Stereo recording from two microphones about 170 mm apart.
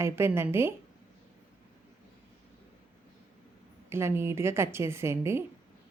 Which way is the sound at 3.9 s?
15° right (ahead or behind).